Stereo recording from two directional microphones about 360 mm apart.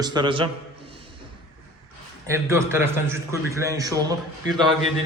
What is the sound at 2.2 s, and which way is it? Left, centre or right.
A man's voice, centre.